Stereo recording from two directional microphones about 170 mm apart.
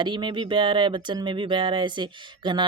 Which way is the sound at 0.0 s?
25° right (ahead or behind).